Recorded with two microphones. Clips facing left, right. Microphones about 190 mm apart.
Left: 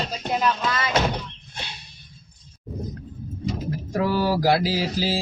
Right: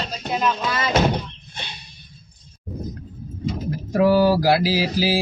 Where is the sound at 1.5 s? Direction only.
5° left (ahead or behind).